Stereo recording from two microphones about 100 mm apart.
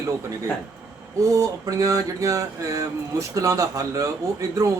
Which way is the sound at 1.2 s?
35° right (ahead or behind).